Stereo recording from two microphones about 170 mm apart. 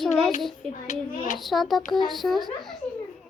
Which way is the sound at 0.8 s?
45° left (ahead or behind).